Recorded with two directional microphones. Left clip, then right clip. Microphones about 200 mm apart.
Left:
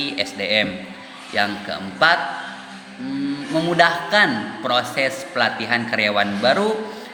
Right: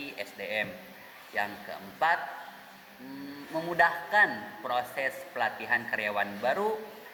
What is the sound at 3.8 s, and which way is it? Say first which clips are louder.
A man's voice: left 8 dB; 20° left (ahead or behind).